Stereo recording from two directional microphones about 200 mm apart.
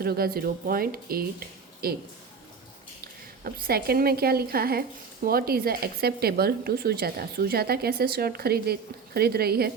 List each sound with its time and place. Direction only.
0.0 s a woman's voice: 50° right (ahead or behind)
3.4 s a woman's voice: 50° right (ahead or behind)